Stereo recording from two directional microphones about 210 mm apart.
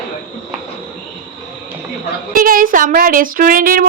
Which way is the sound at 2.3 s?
40° right (ahead or behind).